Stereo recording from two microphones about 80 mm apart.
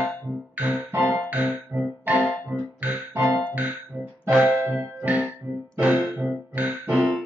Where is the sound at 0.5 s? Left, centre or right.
Right.